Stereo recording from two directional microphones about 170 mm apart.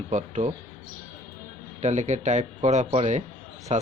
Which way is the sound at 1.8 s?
45° right (ahead or behind).